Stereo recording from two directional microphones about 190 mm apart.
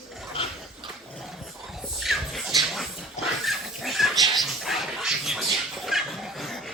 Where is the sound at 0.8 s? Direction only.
Centre (ahead or behind).